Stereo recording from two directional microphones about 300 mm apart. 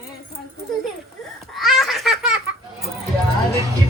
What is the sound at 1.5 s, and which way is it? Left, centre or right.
Baby laughter, centre.